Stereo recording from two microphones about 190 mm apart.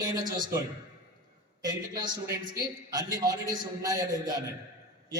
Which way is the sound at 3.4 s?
20° right (ahead or behind).